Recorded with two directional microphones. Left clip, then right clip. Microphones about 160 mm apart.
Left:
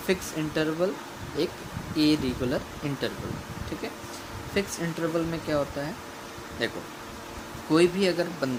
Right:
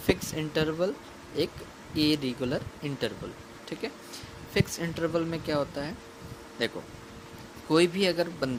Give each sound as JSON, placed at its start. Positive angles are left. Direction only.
{"t": 0.1, "sound": "speech", "side_deg": -60}
{"t": 4.5, "sound": "speech", "side_deg": -60}